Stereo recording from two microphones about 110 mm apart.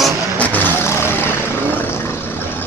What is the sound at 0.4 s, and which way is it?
Vehicle, 15° left (ahead or behind).